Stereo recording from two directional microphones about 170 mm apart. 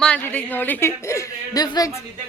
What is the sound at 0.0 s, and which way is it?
Speech, 5° left (ahead or behind).